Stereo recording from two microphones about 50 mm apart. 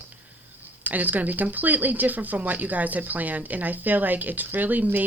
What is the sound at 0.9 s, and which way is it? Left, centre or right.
Speech, right.